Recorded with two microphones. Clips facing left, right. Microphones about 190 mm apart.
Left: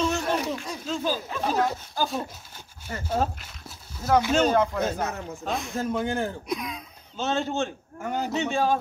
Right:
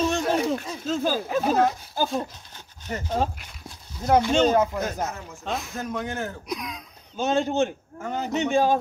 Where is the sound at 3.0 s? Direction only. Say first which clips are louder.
Left 1 dB; 5° left (ahead or behind).